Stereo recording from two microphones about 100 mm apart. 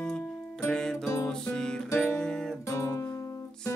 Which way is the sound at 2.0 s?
10° left (ahead or behind).